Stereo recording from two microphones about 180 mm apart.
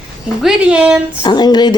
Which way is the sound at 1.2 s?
25° left (ahead or behind).